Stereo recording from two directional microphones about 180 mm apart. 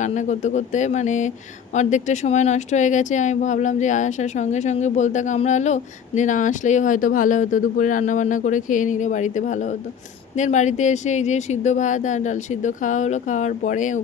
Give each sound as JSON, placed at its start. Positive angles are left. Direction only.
{"t": 0.0, "sound": "speech", "side_deg": 40}